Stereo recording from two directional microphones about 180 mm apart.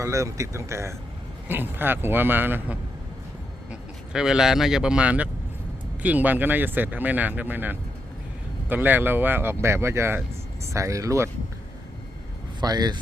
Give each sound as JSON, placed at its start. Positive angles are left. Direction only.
{"t": 0.0, "sound": "speech", "side_deg": -15}
{"t": 12.5, "sound": "speech", "side_deg": -20}